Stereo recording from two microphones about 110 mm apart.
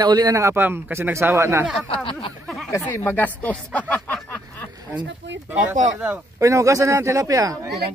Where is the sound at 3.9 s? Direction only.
15° left (ahead or behind).